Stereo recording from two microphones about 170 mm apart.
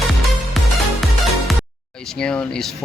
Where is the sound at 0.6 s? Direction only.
Centre (ahead or behind).